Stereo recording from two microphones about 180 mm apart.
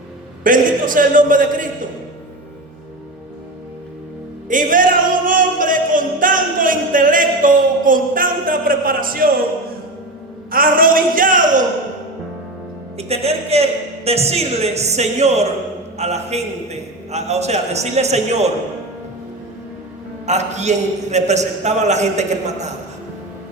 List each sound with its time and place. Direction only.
0.4 s a man's voice: 50° right (ahead or behind)
4.4 s speech: 45° right (ahead or behind)
10.5 s a man's voice: 50° right (ahead or behind)
13.0 s a man's voice: 35° right (ahead or behind)
20.2 s a man's voice: 40° right (ahead or behind)